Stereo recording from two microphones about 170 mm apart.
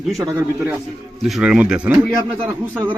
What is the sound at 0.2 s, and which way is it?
Speech, 15° right (ahead or behind).